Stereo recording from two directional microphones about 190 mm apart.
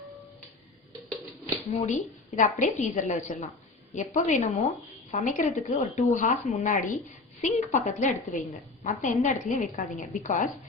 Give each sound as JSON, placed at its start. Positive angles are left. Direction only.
{"t": 1.7, "sound": "speech", "side_deg": 35}